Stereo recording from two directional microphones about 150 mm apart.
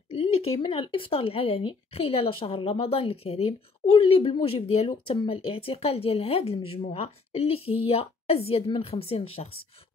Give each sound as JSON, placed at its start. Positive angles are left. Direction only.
{"t": 0.1, "sound": "speech", "side_deg": 40}